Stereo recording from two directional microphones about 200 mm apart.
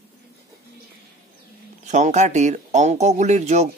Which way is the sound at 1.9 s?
35° right (ahead or behind).